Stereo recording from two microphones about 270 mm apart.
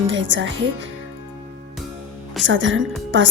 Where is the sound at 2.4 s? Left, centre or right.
Right.